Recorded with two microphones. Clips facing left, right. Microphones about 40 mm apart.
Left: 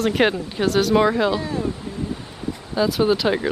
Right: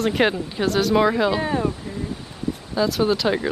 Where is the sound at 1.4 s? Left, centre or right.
Right.